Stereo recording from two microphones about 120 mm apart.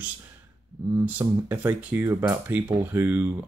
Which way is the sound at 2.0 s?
20° right (ahead or behind).